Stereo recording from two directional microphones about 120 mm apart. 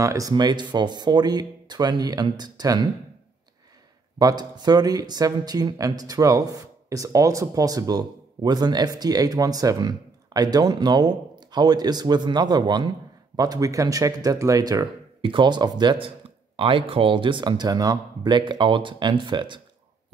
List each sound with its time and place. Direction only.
0.0 s speech: 30° right (ahead or behind)
4.2 s speech: 35° right (ahead or behind)
15.2 s speech: 40° right (ahead or behind)